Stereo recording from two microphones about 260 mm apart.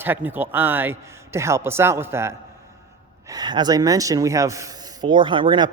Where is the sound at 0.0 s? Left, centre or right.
Centre.